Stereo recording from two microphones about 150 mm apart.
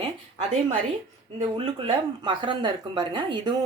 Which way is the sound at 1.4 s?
35° right (ahead or behind).